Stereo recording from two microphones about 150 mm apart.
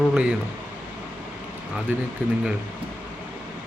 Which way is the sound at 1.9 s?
10° right (ahead or behind).